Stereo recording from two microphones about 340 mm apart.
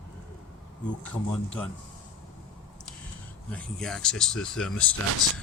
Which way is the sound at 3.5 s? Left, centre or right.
Centre.